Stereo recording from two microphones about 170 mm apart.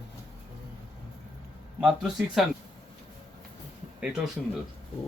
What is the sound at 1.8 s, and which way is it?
Speech, centre (ahead or behind).